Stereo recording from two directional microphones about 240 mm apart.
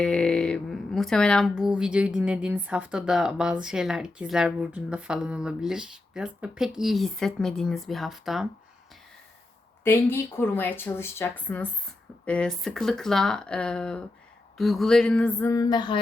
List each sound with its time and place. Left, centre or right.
0.0 s speech: centre
9.8 s speech: centre